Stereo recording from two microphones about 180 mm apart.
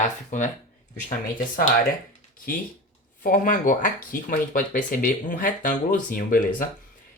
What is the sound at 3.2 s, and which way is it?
Speech, 50° left (ahead or behind).